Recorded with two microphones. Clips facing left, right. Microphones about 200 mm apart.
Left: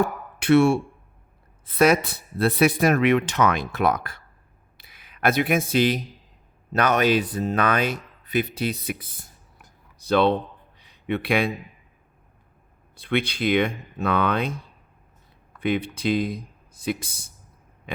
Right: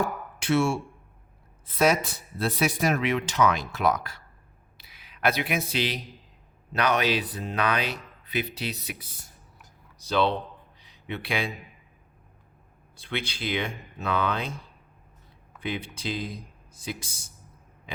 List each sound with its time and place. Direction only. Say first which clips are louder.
0.3 s speech: left 7 dB; 60° left (ahead or behind)
10.8 s a sound: left 9 dB; 55° left (ahead or behind)
13.0 s speech: left 9 dB; 55° left (ahead or behind)
15.6 s speech: left 8 dB; 60° left (ahead or behind)
17.9 s burping: left 7 dB; 55° left (ahead or behind)